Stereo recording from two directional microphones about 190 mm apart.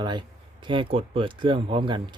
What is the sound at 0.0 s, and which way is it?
Speech, 25° right (ahead or behind).